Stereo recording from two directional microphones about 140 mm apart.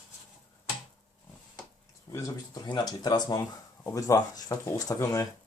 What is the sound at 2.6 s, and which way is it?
Speech, 30° left (ahead or behind).